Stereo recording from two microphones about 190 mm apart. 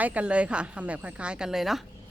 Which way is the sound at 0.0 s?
5° right (ahead or behind).